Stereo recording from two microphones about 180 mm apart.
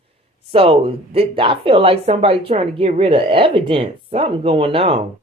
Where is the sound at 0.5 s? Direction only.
30° right (ahead or behind).